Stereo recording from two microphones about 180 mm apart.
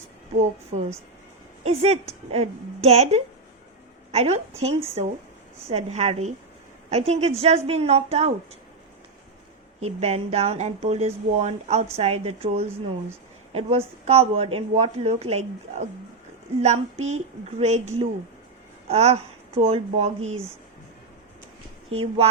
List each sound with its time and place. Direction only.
0.7 s speech: 40° right (ahead or behind)
9.8 s speech: 35° right (ahead or behind)
21.8 s speech: 35° right (ahead or behind)